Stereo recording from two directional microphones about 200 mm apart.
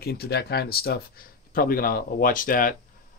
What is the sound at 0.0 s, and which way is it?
Speech, 50° left (ahead or behind).